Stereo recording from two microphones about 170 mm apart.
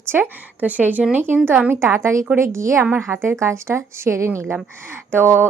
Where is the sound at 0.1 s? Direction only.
10° right (ahead or behind).